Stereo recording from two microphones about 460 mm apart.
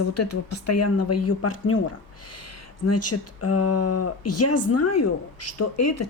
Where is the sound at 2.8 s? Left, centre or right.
Left.